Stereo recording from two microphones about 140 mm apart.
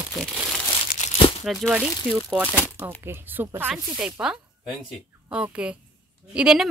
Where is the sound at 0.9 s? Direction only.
90° left.